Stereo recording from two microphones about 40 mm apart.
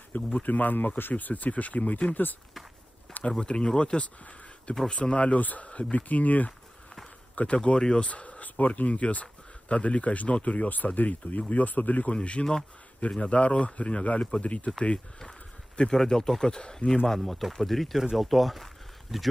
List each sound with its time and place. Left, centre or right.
0.1 s speech: left
1.1 s speech: left
3.3 s speech: left
4.0 s a sound: left
4.8 s speech: left
5.4 s speech: left
5.7 s speech: left
7.3 s speech: left
12.1 s speech: left
15.9 s speech: centre
17.0 s speech: centre